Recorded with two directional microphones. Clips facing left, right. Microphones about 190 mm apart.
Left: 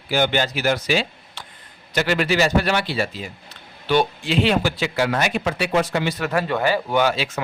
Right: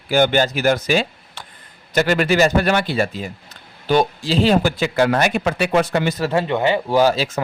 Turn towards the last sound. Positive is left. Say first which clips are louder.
# right 4 dB
turn(degrees=-40)  # may be behind; listen again after turning